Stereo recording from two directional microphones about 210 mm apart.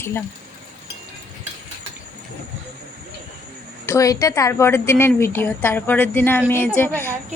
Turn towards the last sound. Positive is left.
turn(degrees=10)  # may be behind; listen again after turning